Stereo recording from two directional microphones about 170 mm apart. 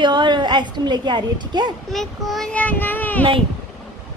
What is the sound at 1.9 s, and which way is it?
A child's voice, centre (ahead or behind).